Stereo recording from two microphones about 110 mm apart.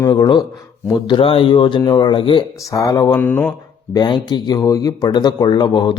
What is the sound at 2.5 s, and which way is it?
Speech, 30° left (ahead or behind).